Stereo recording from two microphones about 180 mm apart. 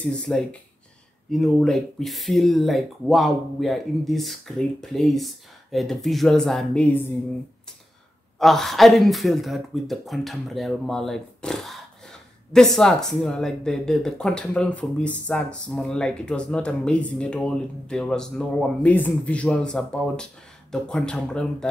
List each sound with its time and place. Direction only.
0.0 s speech: 5° left (ahead or behind)
8.4 s speech: centre (ahead or behind)